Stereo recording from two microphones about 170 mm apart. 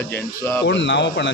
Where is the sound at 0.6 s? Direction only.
90° left.